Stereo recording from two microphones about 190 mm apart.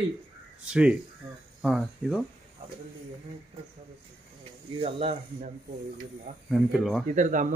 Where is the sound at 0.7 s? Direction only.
5° right (ahead or behind).